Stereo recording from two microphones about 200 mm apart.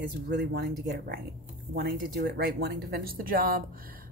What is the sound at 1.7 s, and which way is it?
Speech, 55° right (ahead or behind).